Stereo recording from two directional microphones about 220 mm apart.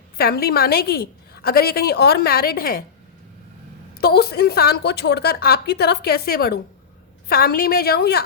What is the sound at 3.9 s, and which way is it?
A woman's voice, 45° left (ahead or behind).